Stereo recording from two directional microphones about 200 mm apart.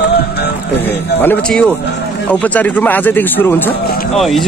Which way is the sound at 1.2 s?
5° left (ahead or behind).